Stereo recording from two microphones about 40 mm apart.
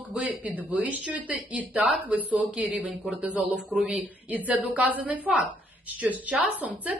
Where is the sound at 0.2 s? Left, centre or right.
Right.